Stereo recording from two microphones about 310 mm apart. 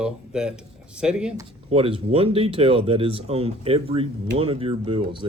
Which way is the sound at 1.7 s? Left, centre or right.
Centre.